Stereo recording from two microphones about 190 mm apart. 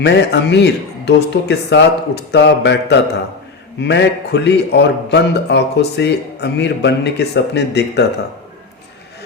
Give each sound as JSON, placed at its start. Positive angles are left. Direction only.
{"t": 0.0, "sound": "a man's voice", "side_deg": 60}